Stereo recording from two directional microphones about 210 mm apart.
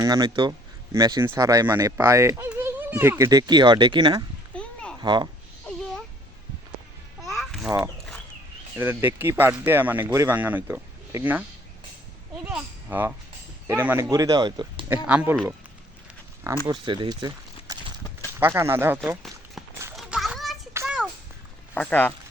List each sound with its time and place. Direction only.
0.0 s speech: 20° right (ahead or behind)
4.5 s a sound: 5° left (ahead or behind)
4.9 s a child's voice: 20° right (ahead or behind)
7.3 s a sound: centre (ahead or behind)
8.8 s speech: 10° right (ahead or behind)
12.5 s speech: 10° right (ahead or behind)
15.0 s speech: 5° right (ahead or behind)
16.8 s a sound: 20° right (ahead or behind)
18.3 s speech: 10° right (ahead or behind)
20.0 s children playing: centre (ahead or behind)
20.8 s music: 5° right (ahead or behind)
21.8 s speech: 5° left (ahead or behind)